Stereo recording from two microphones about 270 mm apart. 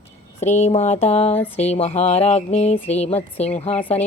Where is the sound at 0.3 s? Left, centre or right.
Left.